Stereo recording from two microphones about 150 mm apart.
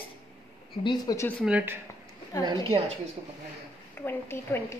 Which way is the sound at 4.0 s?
15° left (ahead or behind).